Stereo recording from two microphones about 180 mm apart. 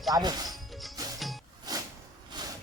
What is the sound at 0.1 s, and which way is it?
Speech, 20° right (ahead or behind).